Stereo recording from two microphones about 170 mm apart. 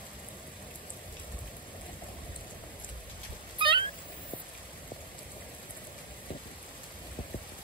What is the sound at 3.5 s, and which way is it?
Cat, 30° right (ahead or behind).